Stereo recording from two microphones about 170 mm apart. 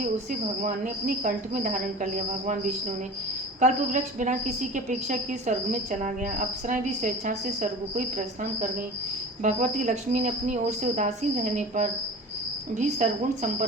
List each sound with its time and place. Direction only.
0.0 s a woman's voice: 50° right (ahead or behind)
9.4 s a woman's voice: 45° right (ahead or behind)